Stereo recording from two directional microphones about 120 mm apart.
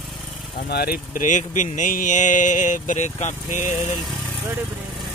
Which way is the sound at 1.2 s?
90° left.